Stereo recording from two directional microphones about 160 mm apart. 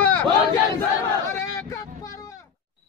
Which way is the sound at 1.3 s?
20° left (ahead or behind).